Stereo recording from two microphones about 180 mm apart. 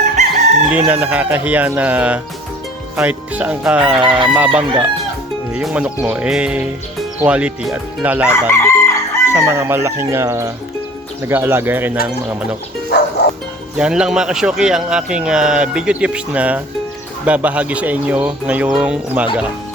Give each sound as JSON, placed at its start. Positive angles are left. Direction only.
{"t": 0.9, "sound": "speech", "side_deg": -10}
{"t": 8.3, "sound": "chicken", "side_deg": 15}
{"t": 9.3, "sound": "speech", "side_deg": -15}
{"t": 12.9, "sound": "music", "side_deg": 70}
{"t": 13.7, "sound": "speech", "side_deg": -5}